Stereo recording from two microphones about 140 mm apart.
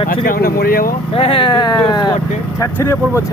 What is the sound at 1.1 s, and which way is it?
Speech, 40° left (ahead or behind).